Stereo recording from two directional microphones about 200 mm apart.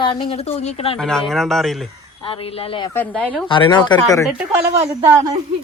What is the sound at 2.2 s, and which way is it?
Speech, 25° left (ahead or behind).